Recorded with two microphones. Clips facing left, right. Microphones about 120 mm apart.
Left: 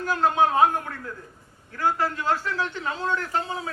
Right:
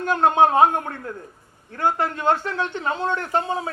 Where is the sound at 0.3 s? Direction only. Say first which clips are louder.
Right 4 dB; 25° right (ahead or behind).